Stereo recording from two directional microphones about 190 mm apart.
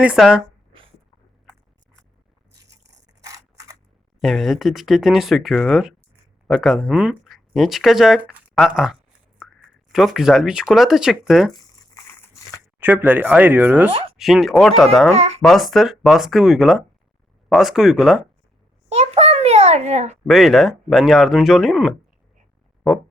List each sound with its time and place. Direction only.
0.0 s speech: 5° right (ahead or behind)
3.2 s camera: 15° right (ahead or behind)
4.2 s speech: centre (ahead or behind)
11.5 s crumpling: 20° left (ahead or behind)
12.8 s speech: 10° right (ahead or behind)
15.1 s speech: 30° right (ahead or behind)
15.4 s speech: centre (ahead or behind)
18.9 s a sound: 35° right (ahead or behind)
20.2 s speech: centre (ahead or behind)